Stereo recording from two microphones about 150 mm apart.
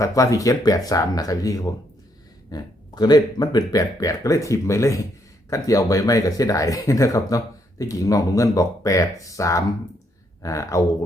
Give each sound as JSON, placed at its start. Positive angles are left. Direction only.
{"t": 0.0, "sound": "speech", "side_deg": 20}